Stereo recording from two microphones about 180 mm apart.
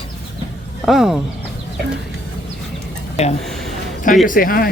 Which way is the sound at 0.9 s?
Centre (ahead or behind).